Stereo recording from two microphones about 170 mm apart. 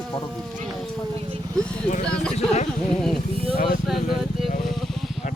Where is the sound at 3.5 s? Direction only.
65° left (ahead or behind).